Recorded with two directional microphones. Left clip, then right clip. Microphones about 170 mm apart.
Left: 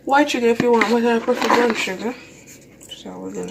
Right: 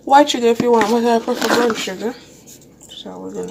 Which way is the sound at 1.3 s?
60° right (ahead or behind).